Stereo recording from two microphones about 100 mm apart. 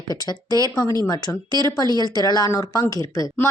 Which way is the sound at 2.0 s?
45° left (ahead or behind).